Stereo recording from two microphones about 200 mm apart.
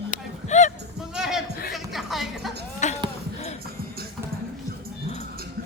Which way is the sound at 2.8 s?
35° left (ahead or behind).